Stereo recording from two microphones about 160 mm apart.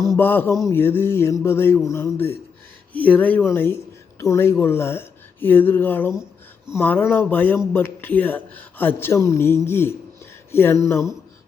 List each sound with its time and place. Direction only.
0.2 s speech: 15° left (ahead or behind)